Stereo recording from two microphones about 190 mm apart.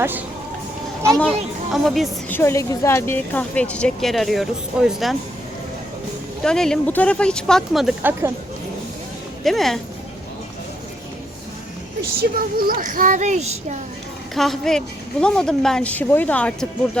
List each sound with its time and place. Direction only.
1.2 s a woman's voice: centre (ahead or behind)
2.4 s a woman's voice: 15° left (ahead or behind); by 5.1 s centre (ahead or behind)
6.4 s a woman's voice: 5° left (ahead or behind)
9.4 s a woman's voice: centre (ahead or behind)
12.2 s speech: 50° right (ahead or behind)
14.3 s a woman's voice: centre (ahead or behind)